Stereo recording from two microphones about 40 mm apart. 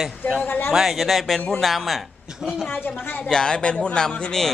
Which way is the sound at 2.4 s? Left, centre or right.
Centre.